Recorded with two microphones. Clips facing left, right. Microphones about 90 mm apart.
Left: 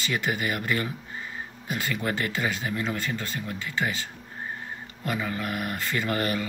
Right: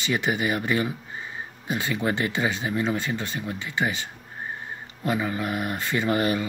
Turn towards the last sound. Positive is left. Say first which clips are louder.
# right 4 dB
turn(degrees=-20)  # may be behind; listen again after turning